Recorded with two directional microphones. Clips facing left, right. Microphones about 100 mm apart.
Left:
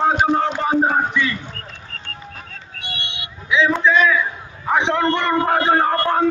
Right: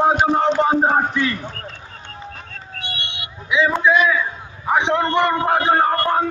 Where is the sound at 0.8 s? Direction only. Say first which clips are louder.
Right 1 dB; 40° right (ahead or behind).